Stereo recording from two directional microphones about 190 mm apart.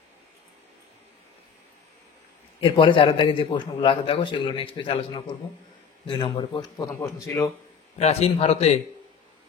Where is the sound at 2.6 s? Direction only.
25° left (ahead or behind).